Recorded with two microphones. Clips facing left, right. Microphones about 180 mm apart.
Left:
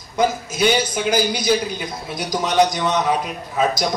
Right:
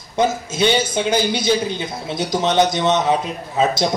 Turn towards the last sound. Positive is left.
turn(degrees=-25)  # may be behind; listen again after turning